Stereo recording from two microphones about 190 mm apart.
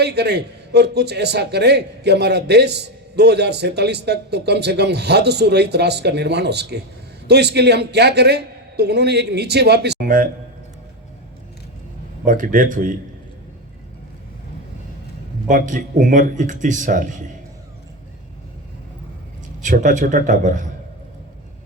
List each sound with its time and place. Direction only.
0.0 s a man's voice: 60° right (ahead or behind)
12.2 s speech: 45° right (ahead or behind)
15.4 s speech: 45° right (ahead or behind)
19.6 s speech: 40° right (ahead or behind)